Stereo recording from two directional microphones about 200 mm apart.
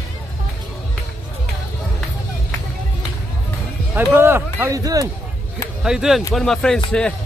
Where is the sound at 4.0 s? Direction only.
10° right (ahead or behind).